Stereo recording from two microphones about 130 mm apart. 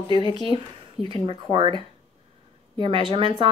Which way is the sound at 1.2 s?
40° right (ahead or behind).